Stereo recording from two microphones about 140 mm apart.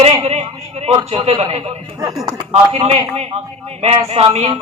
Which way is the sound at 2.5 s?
45° right (ahead or behind).